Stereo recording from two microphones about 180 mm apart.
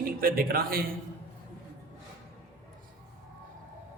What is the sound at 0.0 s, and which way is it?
Speech, 55° right (ahead or behind).